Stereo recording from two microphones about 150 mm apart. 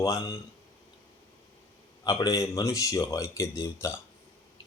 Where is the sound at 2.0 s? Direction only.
20° left (ahead or behind).